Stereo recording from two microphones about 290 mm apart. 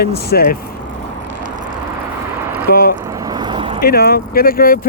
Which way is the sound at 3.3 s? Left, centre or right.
Centre.